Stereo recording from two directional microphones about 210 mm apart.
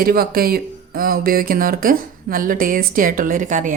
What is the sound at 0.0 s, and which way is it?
Speech, 45° right (ahead or behind).